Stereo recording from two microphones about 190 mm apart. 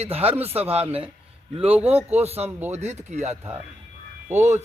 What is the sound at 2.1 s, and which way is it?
Speech, 35° right (ahead or behind).